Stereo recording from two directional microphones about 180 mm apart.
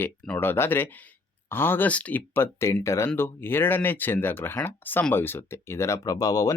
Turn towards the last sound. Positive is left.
turn(degrees=20)  # may be behind; listen again after turning